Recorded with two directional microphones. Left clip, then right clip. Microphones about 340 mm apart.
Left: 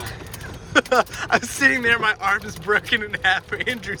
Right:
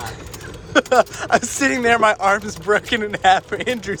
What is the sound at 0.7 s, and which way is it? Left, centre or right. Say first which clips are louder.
Speech: right 3 dB; centre.